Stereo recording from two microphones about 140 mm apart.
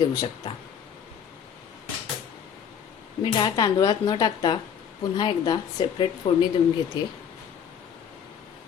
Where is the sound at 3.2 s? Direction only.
30° left (ahead or behind).